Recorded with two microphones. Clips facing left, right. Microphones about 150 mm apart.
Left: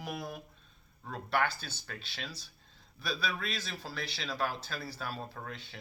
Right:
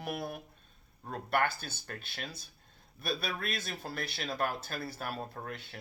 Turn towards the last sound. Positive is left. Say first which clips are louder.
# right 2 dB
turn(degrees=-55)  # may be behind; listen again after turning